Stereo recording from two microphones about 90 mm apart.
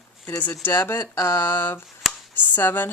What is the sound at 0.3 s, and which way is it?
Speech, 20° left (ahead or behind).